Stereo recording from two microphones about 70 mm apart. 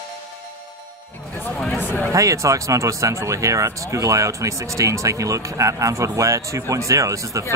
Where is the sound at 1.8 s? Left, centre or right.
Left.